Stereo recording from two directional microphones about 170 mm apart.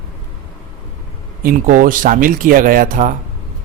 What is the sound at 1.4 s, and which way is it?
Speech, 55° right (ahead or behind).